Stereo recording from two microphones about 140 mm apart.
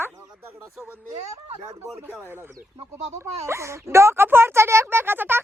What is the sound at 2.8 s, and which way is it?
Speech, 50° right (ahead or behind).